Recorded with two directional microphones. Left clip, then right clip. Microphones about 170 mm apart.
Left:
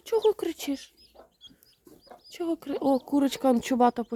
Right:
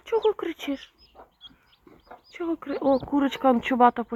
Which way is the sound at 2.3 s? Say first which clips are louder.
Right 1 dB; 35° left (ahead or behind).